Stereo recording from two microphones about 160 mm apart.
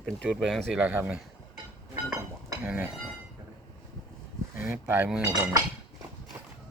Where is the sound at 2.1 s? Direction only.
15° right (ahead or behind).